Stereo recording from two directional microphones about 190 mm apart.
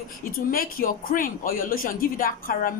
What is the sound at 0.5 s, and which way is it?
Speech, 50° left (ahead or behind).